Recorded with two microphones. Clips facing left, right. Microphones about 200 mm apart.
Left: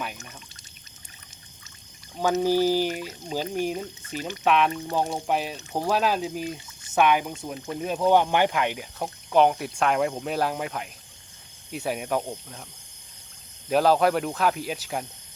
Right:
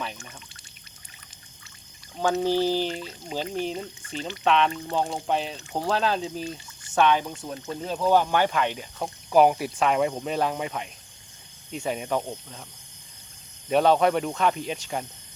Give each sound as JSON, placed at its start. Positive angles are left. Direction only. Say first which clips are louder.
{"t": 2.4, "sound": "speech", "louder": "left 3 dB", "side_deg": 10}
{"t": 9.3, "sound": "speech", "louder": "right 1 dB", "side_deg": -5}
{"t": 13.7, "sound": "speech", "louder": "even", "side_deg": 0}